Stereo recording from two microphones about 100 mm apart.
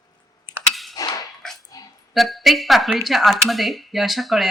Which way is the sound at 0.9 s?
35° left (ahead or behind).